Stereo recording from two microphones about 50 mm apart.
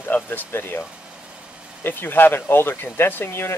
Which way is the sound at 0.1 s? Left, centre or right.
Left.